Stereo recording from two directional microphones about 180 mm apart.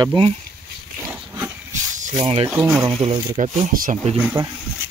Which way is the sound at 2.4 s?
10° right (ahead or behind).